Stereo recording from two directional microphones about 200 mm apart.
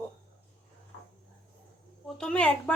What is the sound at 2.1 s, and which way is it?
Speech, 5° left (ahead or behind).